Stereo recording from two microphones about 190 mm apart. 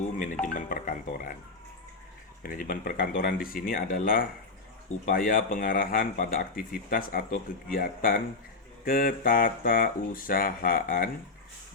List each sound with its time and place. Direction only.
0.4 s speech: 45° left (ahead or behind)
2.4 s speech: 50° left (ahead or behind)